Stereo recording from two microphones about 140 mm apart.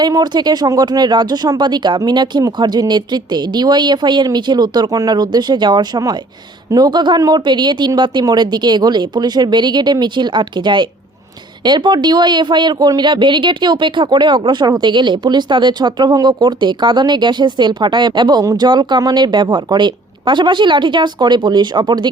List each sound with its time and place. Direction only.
0.0 s speech: 30° right (ahead or behind)